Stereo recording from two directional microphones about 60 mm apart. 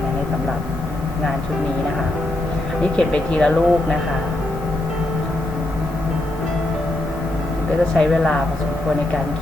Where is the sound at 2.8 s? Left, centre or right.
Centre.